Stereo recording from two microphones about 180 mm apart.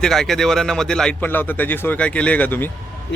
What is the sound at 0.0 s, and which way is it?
Speech, centre (ahead or behind).